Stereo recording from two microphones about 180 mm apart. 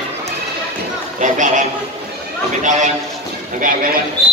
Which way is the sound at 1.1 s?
45° right (ahead or behind).